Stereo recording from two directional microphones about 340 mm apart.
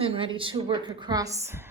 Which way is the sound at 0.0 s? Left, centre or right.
Centre.